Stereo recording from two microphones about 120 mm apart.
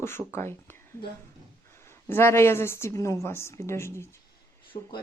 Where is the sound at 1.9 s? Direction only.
20° left (ahead or behind).